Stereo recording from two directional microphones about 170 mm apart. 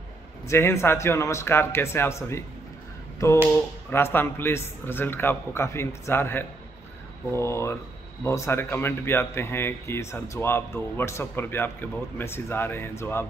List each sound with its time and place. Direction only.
0.5 s speech: 15° left (ahead or behind)
3.9 s speech: 15° left (ahead or behind)